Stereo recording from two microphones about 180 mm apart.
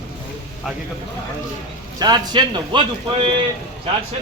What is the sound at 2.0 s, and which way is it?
Speech, 25° right (ahead or behind).